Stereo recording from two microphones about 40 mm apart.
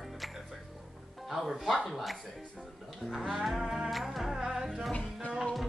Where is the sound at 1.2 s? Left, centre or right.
Centre.